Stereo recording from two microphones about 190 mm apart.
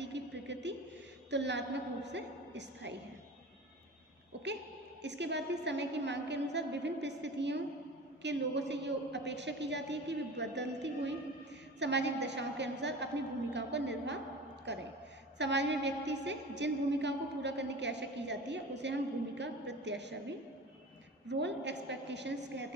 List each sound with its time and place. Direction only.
0.0 s a sound: 65° right (ahead or behind)
1.3 s a woman's voice: 65° right (ahead or behind)
5.0 s a woman's voice: 65° right (ahead or behind)
21.3 s a woman's voice: 65° right (ahead or behind)